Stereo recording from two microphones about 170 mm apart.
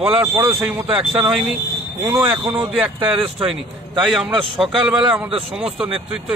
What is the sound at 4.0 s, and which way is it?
Speech, centre (ahead or behind).